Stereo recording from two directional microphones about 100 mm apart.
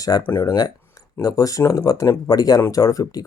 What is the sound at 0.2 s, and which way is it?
Speech, 20° left (ahead or behind).